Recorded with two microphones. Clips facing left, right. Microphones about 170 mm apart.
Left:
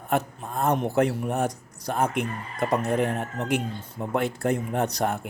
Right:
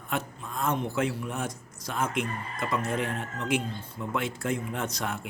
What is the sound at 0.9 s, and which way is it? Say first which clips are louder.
Speech: left 6 dB; 40° left (ahead or behind).